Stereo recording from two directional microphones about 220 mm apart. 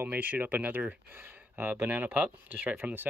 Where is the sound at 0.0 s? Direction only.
10° right (ahead or behind).